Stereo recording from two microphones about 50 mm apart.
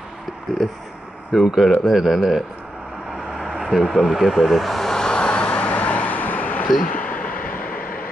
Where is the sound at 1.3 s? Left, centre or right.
Centre.